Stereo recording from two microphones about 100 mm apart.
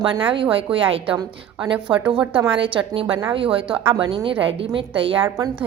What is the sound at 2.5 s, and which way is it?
A woman's voice, 60° right (ahead or behind).